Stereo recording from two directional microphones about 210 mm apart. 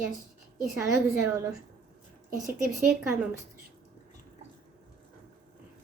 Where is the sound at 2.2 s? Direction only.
40° right (ahead or behind).